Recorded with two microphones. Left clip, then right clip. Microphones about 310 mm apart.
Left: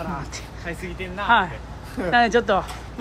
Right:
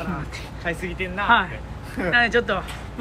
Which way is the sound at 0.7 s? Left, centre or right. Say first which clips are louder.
Right 5 dB; centre.